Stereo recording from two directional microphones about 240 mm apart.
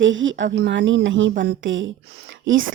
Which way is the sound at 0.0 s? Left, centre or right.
Right.